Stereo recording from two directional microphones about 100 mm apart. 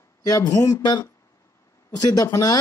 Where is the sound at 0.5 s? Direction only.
35° left (ahead or behind).